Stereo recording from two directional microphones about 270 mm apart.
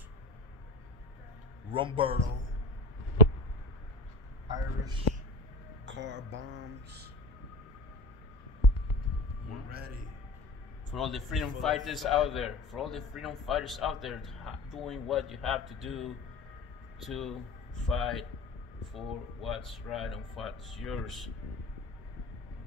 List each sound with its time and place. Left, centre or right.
1.7 s a man's voice: centre
4.5 s a sound: centre
5.9 s speech: right
9.7 s a man's voice: right
10.9 s a man's voice: centre